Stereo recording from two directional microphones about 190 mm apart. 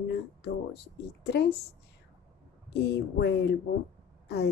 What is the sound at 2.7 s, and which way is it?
Speech, 60° left (ahead or behind).